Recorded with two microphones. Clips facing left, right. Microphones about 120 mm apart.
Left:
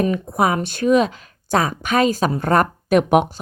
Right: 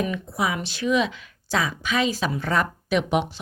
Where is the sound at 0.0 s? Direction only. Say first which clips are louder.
Left 7 dB; 50° left (ahead or behind).